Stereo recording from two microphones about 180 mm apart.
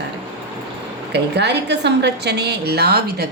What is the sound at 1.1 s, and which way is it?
Speech, 70° right (ahead or behind).